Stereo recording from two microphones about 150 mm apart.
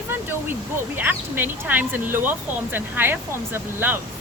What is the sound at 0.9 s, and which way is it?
A woman's voice, 15° right (ahead or behind).